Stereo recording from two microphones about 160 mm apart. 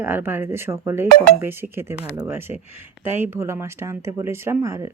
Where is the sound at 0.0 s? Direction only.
10° right (ahead or behind).